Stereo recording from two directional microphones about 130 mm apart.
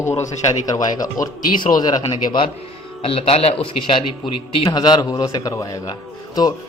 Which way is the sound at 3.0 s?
50° left (ahead or behind).